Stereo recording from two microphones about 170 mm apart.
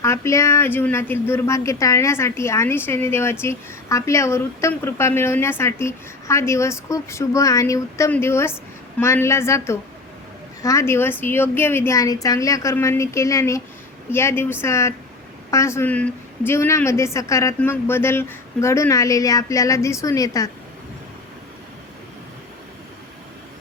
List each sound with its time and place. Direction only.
0.0 s a woman's voice: 15° left (ahead or behind)